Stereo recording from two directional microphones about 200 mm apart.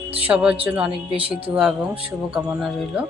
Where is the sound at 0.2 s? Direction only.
5° right (ahead or behind).